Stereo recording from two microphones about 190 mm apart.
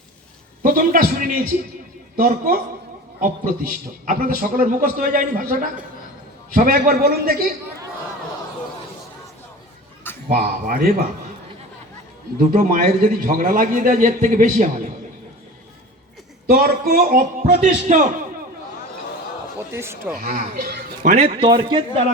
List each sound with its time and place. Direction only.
0.6 s a man's voice: 45° right (ahead or behind)
10.2 s a man's voice: 50° right (ahead or behind)
12.5 s a man's voice: 45° right (ahead or behind)
16.5 s a man's voice: 55° right (ahead or behind)
19.7 s speech: 15° right (ahead or behind)
20.1 s a man's voice: 45° right (ahead or behind)
21.1 s speech: 35° right (ahead or behind)